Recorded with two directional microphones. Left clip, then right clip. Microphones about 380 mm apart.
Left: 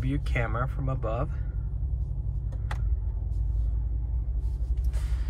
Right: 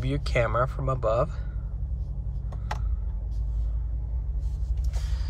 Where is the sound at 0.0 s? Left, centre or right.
Centre.